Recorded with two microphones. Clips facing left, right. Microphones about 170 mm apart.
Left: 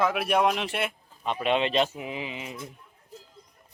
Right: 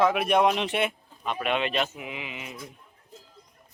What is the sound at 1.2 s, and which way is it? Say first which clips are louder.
Speech: left 2 dB; 30° left (ahead or behind).